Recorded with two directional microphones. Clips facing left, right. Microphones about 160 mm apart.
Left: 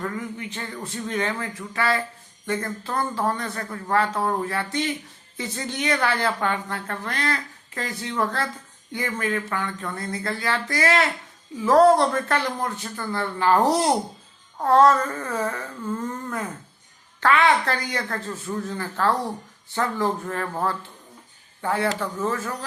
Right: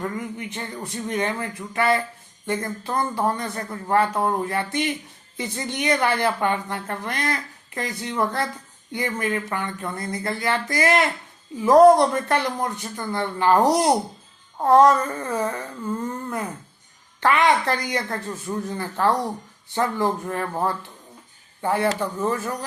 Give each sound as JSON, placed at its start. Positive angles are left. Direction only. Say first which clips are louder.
{"t": 0.0, "sound": "speech", "louder": "right 1 dB", "side_deg": -20}